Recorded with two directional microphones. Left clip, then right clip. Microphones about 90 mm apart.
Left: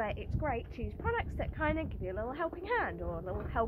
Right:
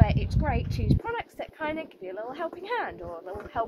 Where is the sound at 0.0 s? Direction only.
30° right (ahead or behind).